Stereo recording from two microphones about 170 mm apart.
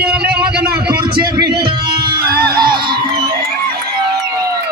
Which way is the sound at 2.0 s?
65° right (ahead or behind).